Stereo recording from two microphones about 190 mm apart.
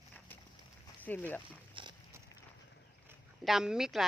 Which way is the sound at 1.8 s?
25° right (ahead or behind).